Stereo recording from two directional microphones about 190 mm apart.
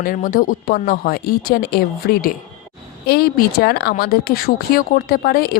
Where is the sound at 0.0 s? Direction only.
50° left (ahead or behind).